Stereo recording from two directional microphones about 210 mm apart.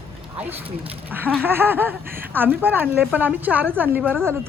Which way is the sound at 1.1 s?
10° right (ahead or behind).